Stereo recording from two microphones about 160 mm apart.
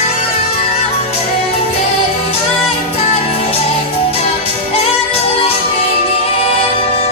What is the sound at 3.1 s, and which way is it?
Music, 40° left (ahead or behind).